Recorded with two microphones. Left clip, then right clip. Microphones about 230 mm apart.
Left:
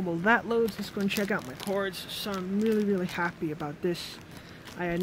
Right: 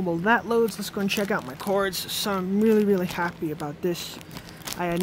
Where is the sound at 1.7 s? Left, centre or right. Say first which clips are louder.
Right 7 dB; right.